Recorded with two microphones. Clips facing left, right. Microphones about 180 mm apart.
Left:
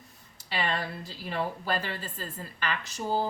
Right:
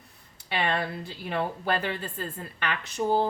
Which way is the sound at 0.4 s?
60° right (ahead or behind).